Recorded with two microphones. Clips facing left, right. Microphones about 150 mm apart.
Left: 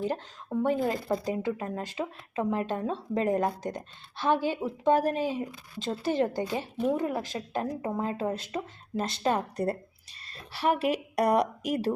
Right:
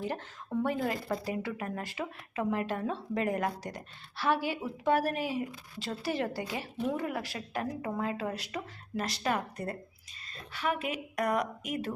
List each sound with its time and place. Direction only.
0.1 s a woman's voice: 15° left (ahead or behind); by 11.9 s 35° left (ahead or behind)